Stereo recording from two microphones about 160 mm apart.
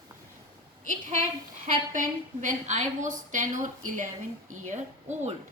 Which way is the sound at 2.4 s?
50° right (ahead or behind).